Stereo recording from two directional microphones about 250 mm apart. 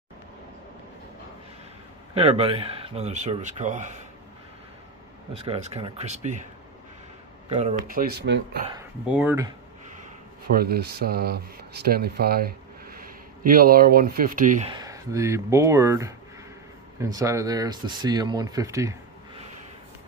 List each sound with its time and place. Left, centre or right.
2.1 s speech: right
5.3 s speech: right
7.4 s speech: right
9.0 s speech: centre
10.5 s speech: right
14.7 s speech: centre